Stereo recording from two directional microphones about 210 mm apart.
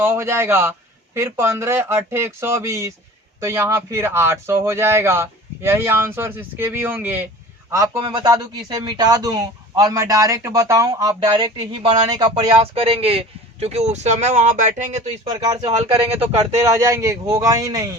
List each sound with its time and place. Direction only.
0.0 s a man's voice: 10° right (ahead or behind); by 15.3 s 30° right (ahead or behind)
15.3 s speech: 15° right (ahead or behind)
15.8 s a man's voice: 30° right (ahead or behind)
16.6 s speech: 15° right (ahead or behind)